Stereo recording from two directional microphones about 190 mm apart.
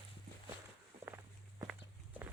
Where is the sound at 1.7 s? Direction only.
10° right (ahead or behind).